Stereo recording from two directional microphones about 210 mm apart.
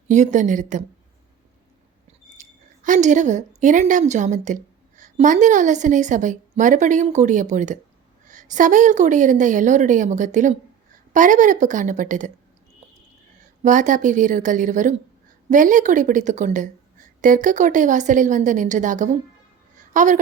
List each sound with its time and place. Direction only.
0.1 s a woman's voice: 35° right (ahead or behind)
2.4 s a woman's voice: 35° right (ahead or behind)
13.6 s a woman's voice: 35° right (ahead or behind)